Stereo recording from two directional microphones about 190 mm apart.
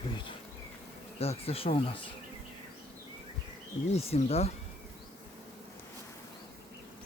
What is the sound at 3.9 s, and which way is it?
Speech, 30° left (ahead or behind).